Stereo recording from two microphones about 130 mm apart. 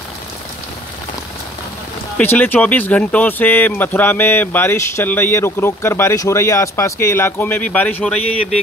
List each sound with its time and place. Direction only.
2.1 s speech: 10° left (ahead or behind)